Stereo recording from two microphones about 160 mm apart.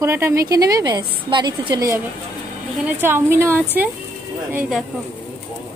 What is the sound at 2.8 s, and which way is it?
Speech, 10° right (ahead or behind).